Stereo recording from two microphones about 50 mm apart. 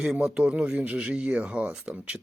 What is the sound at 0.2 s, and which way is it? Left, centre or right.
Speech, right.